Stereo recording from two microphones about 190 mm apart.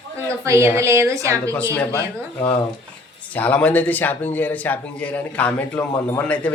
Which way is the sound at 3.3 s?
10° left (ahead or behind).